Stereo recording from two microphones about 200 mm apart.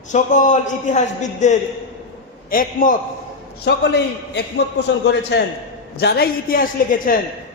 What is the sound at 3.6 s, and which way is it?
A man's voice, 55° left (ahead or behind).